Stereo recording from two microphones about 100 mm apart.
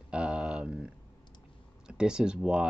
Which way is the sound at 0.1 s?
10° right (ahead or behind).